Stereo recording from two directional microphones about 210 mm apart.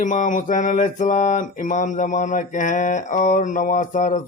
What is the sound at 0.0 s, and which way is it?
Mantra, 35° left (ahead or behind).